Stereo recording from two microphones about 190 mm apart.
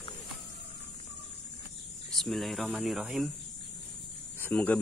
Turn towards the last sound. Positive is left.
turn(degrees=5)  # may be behind; listen again after turning